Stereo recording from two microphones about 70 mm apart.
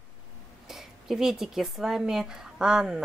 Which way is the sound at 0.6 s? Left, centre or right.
Centre.